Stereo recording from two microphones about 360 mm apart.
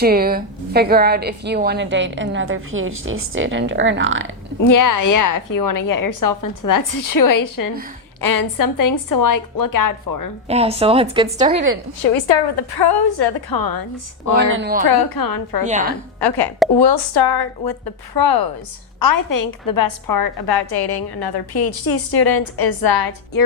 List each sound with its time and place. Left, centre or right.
0.0 s a woman's voice: right
4.6 s a woman's voice: left
10.5 s speech: centre
12.5 s a woman's voice: left
14.3 s a woman's voice: right
14.8 s a woman's voice: left
15.6 s a woman's voice: centre
16.7 s a woman's voice: left
18.9 s a woman's voice: left